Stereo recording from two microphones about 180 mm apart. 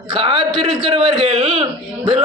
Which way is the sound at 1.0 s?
35° right (ahead or behind).